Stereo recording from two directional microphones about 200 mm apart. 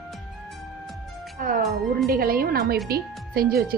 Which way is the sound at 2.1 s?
45° right (ahead or behind).